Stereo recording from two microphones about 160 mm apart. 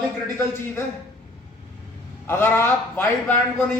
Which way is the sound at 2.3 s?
15° left (ahead or behind).